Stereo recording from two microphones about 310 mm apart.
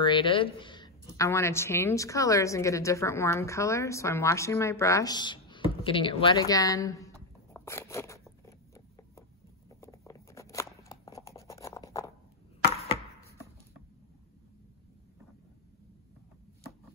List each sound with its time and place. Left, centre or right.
0.0 s a woman's voice: centre
7.5 s a sound: centre
12.7 s chopping: centre